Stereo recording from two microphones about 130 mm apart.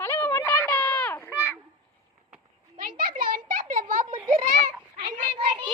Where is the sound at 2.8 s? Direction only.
90° right.